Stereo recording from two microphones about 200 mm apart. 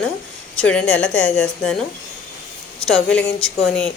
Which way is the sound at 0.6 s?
5° left (ahead or behind).